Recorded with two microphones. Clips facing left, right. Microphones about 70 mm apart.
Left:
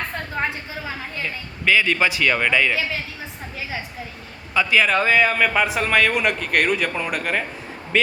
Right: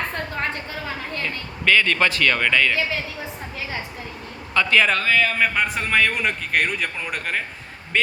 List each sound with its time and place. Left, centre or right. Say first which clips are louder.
0.1 s a woman's voice: left 1 dB; centre
4.5 s a man's voice: even; centre
4.9 s speech: left 3 dB; left
5.4 s a man's voice: left 2 dB; centre